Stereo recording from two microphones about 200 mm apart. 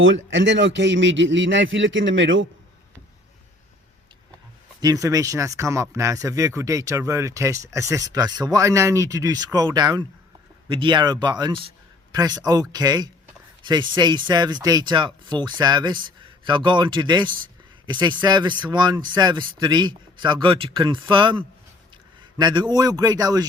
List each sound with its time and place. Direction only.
0.0 s a man's voice: 70° right (ahead or behind)
4.8 s speech: 15° right (ahead or behind)